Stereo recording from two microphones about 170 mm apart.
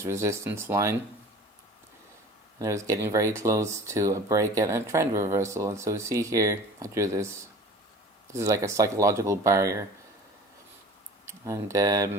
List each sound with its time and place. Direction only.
0.0 s speech: 15° right (ahead or behind)
2.6 s speech: 20° right (ahead or behind)
11.3 s speech: 15° right (ahead or behind)